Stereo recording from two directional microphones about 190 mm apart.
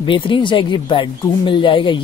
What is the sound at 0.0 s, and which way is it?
Speech, 25° left (ahead or behind).